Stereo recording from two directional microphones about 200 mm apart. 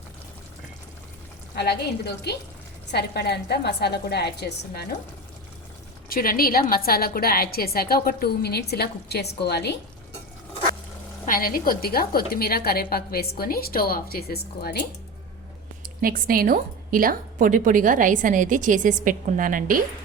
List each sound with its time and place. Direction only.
1.5 s a woman's voice: 55° left (ahead or behind)
6.1 s a woman's voice: 45° left (ahead or behind)
11.3 s a woman's voice: 45° left (ahead or behind)
15.8 s a woman's voice: 45° right (ahead or behind)